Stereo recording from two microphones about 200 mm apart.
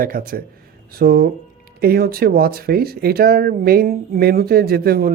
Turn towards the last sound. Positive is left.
turn(degrees=-50)  # may be behind; listen again after turning